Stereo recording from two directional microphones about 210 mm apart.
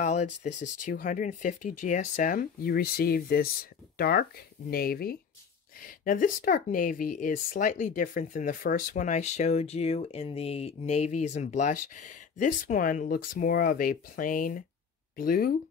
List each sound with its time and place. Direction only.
0.0 s speech: 35° left (ahead or behind)